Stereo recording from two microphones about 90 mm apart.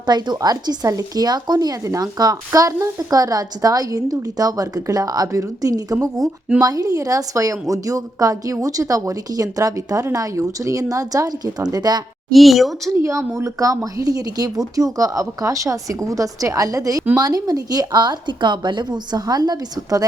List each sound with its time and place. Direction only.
0.0 s speech: 50° right (ahead or behind)
12.3 s speech: centre (ahead or behind)
12.9 s speech: 35° right (ahead or behind)